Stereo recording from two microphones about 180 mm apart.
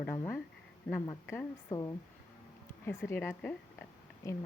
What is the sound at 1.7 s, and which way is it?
A woman's voice, 15° left (ahead or behind).